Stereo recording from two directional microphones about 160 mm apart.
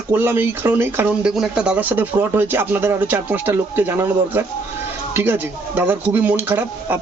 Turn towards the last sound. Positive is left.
turn(degrees=-10)  # may be behind; listen again after turning